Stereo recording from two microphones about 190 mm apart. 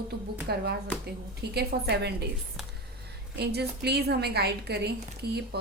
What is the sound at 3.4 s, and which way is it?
A woman's voice, 60° right (ahead or behind).